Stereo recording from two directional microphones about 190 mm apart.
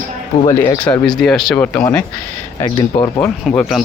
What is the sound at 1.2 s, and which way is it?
Speech, centre (ahead or behind).